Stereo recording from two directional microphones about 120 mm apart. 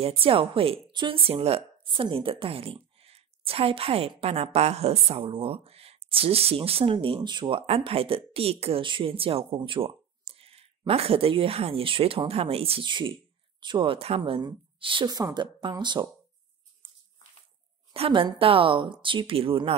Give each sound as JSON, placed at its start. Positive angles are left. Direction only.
{"t": 0.0, "sound": "a woman's voice", "side_deg": -50}
{"t": 17.9, "sound": "a woman's voice", "side_deg": -50}